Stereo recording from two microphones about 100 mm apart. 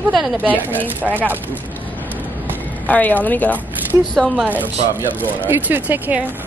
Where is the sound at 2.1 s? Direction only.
20° right (ahead or behind).